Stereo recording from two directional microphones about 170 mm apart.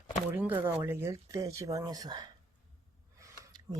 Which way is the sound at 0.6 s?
15° right (ahead or behind).